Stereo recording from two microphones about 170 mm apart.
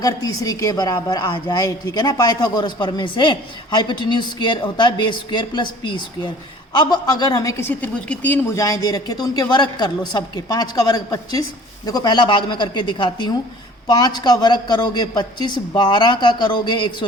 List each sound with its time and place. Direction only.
0.0 s a woman's voice: 20° left (ahead or behind)